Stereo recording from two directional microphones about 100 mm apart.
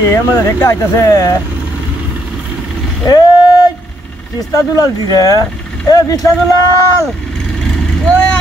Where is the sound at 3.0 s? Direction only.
45° left (ahead or behind).